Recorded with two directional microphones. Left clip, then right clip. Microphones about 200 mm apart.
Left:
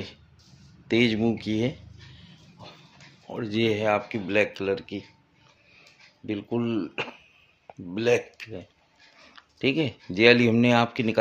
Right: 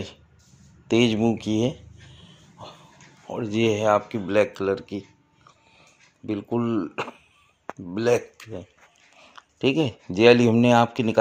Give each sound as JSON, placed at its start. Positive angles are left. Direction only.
{"t": 0.8, "sound": "a sound", "side_deg": -20}
{"t": 3.3, "sound": "speech", "side_deg": -20}
{"t": 6.2, "sound": "speech", "side_deg": -15}